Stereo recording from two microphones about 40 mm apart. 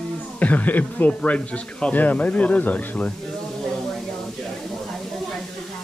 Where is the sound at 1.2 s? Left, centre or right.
Left.